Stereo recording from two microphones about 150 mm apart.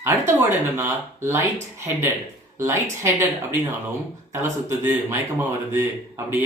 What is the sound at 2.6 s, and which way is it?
Speech, 20° right (ahead or behind).